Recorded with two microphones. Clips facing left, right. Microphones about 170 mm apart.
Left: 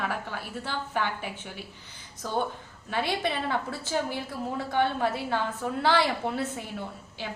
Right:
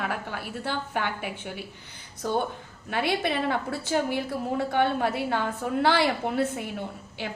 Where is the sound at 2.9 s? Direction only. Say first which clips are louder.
Right 2 dB; 15° right (ahead or behind).